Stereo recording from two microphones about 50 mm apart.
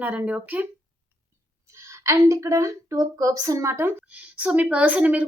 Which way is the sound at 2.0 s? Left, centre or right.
Right.